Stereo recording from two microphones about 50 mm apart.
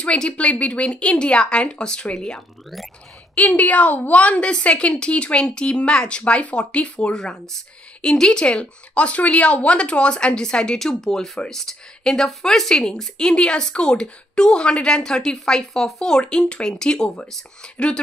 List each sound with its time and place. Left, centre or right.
0.0 s a woman's voice: left
3.3 s a woman's voice: left